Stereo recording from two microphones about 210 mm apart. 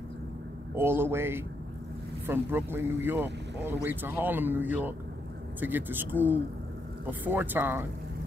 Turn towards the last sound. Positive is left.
turn(degrees=-10)  # may be behind; listen again after turning